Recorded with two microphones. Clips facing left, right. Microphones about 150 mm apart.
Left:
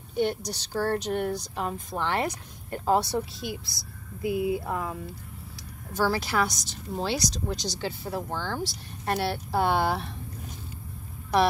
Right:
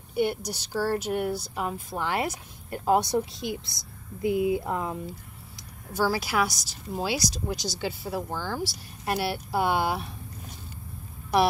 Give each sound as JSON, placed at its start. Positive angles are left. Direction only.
{"t": 0.1, "sound": "speech", "side_deg": -10}
{"t": 5.9, "sound": "speech", "side_deg": -10}